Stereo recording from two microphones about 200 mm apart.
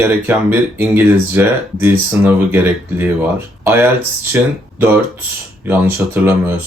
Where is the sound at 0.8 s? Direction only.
10° right (ahead or behind).